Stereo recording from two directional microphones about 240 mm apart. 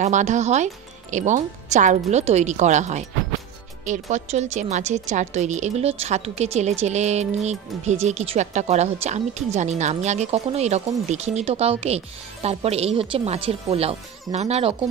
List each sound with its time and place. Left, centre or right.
0.0 s a woman's voice: right